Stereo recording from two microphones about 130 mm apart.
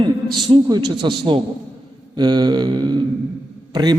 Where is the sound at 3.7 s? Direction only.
35° right (ahead or behind).